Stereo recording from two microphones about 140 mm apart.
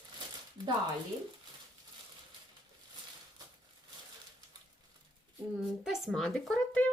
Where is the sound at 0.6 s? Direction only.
30° right (ahead or behind).